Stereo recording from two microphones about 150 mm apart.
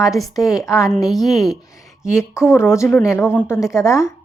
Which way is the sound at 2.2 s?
15° left (ahead or behind).